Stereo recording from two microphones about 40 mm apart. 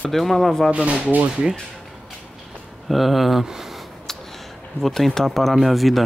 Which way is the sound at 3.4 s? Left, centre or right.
Centre.